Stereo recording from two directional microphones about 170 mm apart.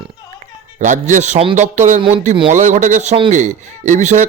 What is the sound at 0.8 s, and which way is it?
A man's voice, 45° right (ahead or behind).